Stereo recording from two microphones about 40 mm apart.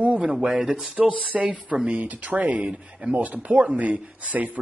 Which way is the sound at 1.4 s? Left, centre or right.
Right.